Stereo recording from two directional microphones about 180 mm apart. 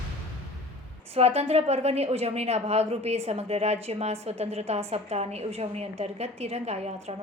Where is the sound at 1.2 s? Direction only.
35° right (ahead or behind).